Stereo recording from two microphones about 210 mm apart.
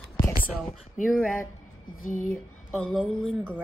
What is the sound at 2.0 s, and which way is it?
Speech, 40° left (ahead or behind).